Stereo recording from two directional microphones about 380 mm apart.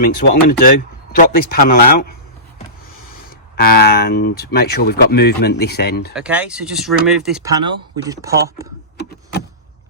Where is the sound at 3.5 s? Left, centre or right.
Left.